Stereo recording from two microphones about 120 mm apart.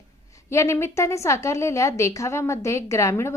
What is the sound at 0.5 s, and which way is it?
A woman's voice, 25° left (ahead or behind).